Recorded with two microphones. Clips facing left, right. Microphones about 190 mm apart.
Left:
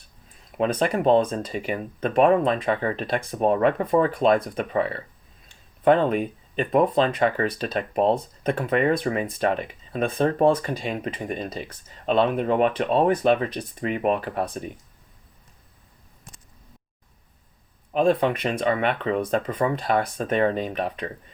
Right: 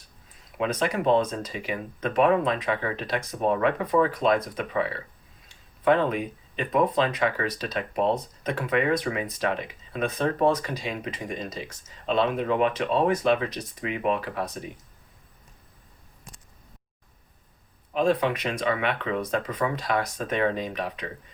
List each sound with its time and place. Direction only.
0.5 s speech: 45° left (ahead or behind)
5.5 s a sound: 45° left (ahead or behind)
6.7 s speech: 45° left (ahead or behind)
17.9 s speech: 50° left (ahead or behind)